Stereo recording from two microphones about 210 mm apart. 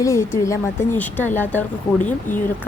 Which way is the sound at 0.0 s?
15° left (ahead or behind).